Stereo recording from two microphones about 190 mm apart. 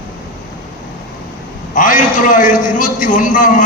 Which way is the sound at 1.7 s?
45° left (ahead or behind).